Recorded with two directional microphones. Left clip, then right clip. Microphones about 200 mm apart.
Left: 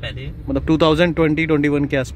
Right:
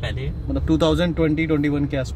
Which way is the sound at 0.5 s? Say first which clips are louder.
Left 4 dB; 30° left (ahead or behind).